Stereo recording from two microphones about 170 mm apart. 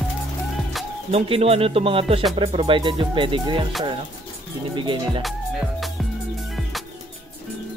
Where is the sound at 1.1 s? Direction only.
35° right (ahead or behind).